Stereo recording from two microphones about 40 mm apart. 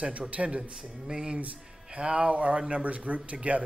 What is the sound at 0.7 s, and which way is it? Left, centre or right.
Speech, right.